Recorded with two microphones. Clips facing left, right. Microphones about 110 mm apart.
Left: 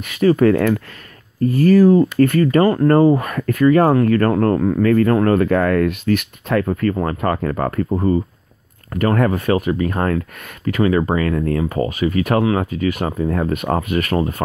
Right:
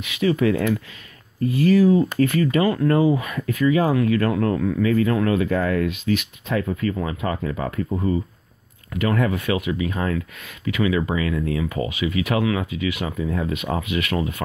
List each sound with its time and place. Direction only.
0.0 s speech: 45° left (ahead or behind)
7.9 s speech: 45° left (ahead or behind)